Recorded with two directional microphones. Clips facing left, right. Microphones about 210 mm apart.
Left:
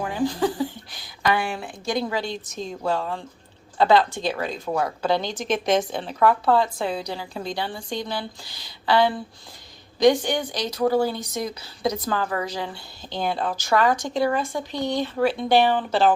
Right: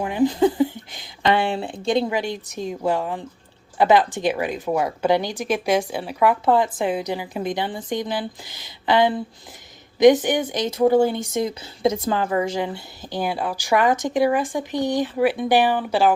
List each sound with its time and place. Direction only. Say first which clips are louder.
0.0 s a sound: right 5 dB; 20° right (ahead or behind)
1.8 s a woman's voice: right 5 dB; 25° right (ahead or behind)
2.1 s speech: right 3 dB; 15° right (ahead or behind)